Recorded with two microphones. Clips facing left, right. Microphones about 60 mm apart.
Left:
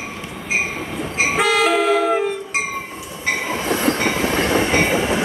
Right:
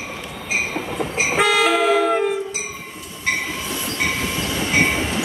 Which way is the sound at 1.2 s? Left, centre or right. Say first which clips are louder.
Even; centre.